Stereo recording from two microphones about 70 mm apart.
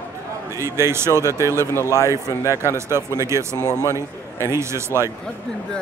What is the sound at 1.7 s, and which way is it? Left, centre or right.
Speech, left.